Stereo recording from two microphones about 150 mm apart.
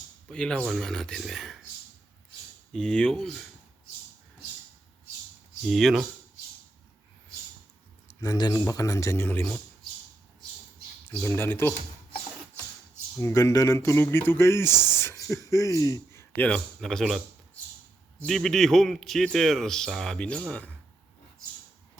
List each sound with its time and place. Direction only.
0.3 s a man's voice: 5° left (ahead or behind)
2.7 s a man's voice: 5° left (ahead or behind)
5.6 s a man's voice: centre (ahead or behind)
8.0 s speech: 25° left (ahead or behind)
11.1 s speech: 15° left (ahead or behind)
13.1 s speech: 20° left (ahead or behind)
16.3 s a man's voice: 10° left (ahead or behind)
18.3 s a man's voice: centre (ahead or behind)